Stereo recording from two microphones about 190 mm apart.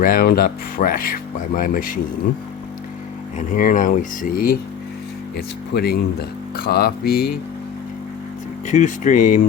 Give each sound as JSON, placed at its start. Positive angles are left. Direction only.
{"t": 0.0, "sound": "speech", "side_deg": 50}
{"t": 3.3, "sound": "speech", "side_deg": 45}
{"t": 5.7, "sound": "speech", "side_deg": 55}
{"t": 8.6, "sound": "speech", "side_deg": 40}